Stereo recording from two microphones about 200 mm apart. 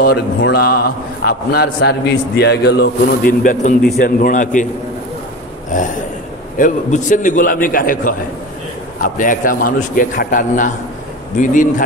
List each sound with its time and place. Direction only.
0.0 s a man's voice: 55° left (ahead or behind)
5.7 s a man's voice: 40° left (ahead or behind)